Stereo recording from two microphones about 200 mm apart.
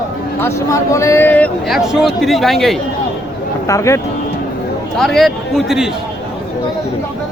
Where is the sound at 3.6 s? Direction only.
15° left (ahead or behind).